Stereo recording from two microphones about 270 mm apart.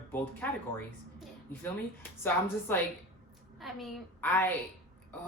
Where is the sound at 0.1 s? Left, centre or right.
Centre.